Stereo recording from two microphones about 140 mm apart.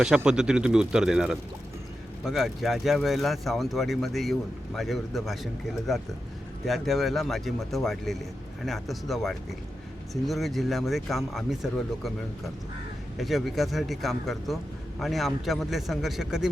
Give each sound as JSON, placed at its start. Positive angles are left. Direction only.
{"t": 0.3, "sound": "speech", "side_deg": -5}
{"t": 13.1, "sound": "speech", "side_deg": 0}